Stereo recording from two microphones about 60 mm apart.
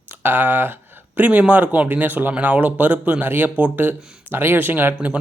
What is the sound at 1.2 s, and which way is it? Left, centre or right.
Speech, right.